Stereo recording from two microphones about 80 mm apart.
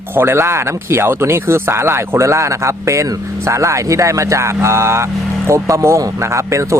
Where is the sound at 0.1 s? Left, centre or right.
Right.